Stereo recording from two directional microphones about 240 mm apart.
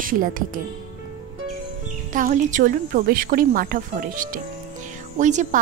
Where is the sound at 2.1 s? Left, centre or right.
Right.